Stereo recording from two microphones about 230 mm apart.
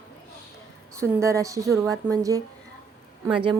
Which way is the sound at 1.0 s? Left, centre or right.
Centre.